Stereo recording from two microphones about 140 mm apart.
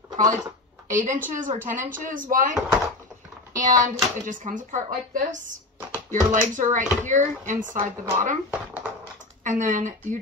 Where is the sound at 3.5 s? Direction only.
65° right (ahead or behind).